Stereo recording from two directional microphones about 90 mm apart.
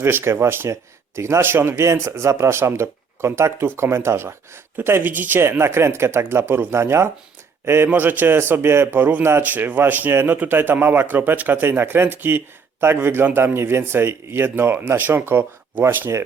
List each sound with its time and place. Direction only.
0.0 s speech: 30° right (ahead or behind)